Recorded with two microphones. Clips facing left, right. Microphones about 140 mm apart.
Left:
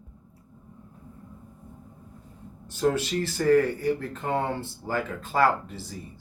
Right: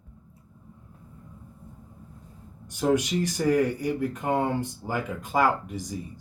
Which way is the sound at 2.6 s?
15° right (ahead or behind).